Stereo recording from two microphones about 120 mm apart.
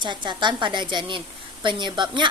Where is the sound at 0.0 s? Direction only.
40° right (ahead or behind).